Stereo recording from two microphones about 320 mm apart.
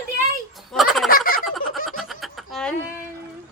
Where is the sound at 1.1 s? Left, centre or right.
Left.